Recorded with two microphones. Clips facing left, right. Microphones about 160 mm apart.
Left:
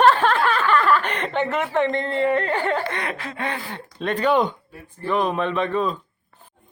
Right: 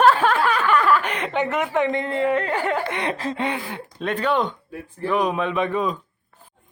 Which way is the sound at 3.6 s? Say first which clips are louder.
Even; 5° right (ahead or behind).